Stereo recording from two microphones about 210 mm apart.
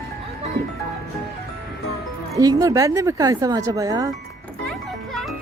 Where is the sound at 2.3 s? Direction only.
15° right (ahead or behind).